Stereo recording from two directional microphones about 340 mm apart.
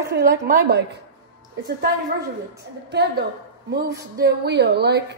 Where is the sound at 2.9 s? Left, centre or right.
Right.